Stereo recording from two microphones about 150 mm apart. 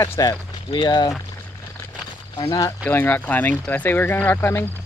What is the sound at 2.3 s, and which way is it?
Speech, 30° left (ahead or behind).